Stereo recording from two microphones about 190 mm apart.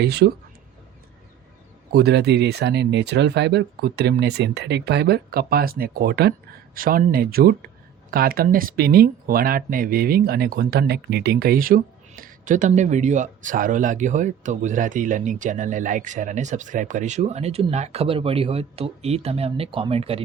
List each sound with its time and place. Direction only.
0.0 s speech: 55° right (ahead or behind)
1.9 s speech: 60° right (ahead or behind); by 20.2 s 30° right (ahead or behind)